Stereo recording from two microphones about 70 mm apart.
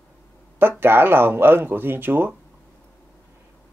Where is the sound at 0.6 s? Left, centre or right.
Right.